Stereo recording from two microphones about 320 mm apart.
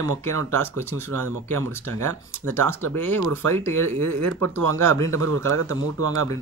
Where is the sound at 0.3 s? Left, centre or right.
Right.